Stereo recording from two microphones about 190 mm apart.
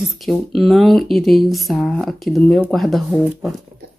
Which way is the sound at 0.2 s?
Centre (ahead or behind).